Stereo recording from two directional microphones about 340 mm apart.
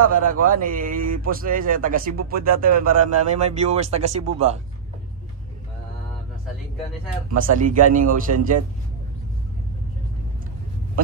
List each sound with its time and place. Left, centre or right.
0.0 s a man's voice: right
7.3 s a man's voice: right